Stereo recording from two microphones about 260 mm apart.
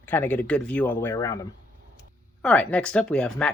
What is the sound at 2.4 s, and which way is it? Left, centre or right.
Speech, centre.